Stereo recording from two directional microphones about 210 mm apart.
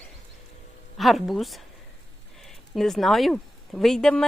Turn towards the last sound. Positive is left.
turn(degrees=0)  # may be behind; listen again after turning